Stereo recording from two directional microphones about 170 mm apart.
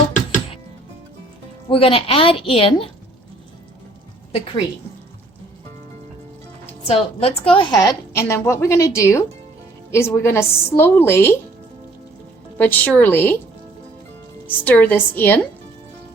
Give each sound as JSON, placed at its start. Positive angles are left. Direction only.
{"t": 1.7, "sound": "a woman's voice", "side_deg": 35}
{"t": 4.3, "sound": "a woman's voice", "side_deg": 35}
{"t": 6.8, "sound": "a woman's voice", "side_deg": 35}
{"t": 12.5, "sound": "a woman's voice", "side_deg": 10}
{"t": 14.4, "sound": "a woman's voice", "side_deg": 10}